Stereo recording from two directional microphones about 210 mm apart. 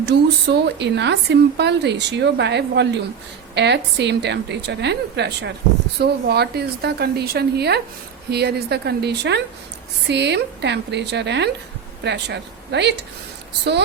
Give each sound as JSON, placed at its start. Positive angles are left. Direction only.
{"t": 0.0, "sound": "speech", "side_deg": -55}